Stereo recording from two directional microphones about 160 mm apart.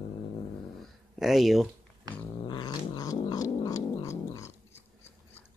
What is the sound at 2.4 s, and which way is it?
Cat, 30° left (ahead or behind).